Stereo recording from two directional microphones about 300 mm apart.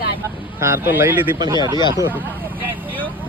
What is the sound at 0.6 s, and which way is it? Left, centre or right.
Speech, centre.